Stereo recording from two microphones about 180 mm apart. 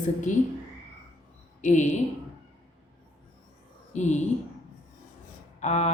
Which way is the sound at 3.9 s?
40° left (ahead or behind).